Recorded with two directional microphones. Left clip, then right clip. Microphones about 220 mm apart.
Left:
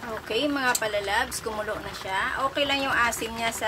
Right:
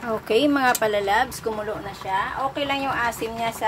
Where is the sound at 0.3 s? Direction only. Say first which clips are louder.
Right 6 dB; 20° right (ahead or behind).